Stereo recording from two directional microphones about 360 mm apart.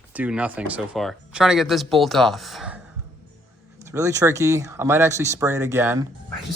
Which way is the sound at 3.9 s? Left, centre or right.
Centre.